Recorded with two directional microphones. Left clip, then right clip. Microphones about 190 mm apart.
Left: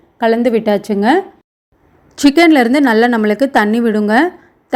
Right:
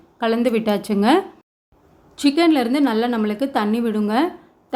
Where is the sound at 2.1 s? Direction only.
35° left (ahead or behind).